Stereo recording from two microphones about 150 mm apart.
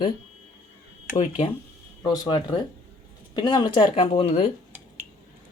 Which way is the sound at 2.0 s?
25° left (ahead or behind).